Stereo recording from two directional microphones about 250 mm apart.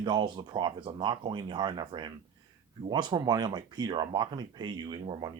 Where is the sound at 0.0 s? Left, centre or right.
Centre.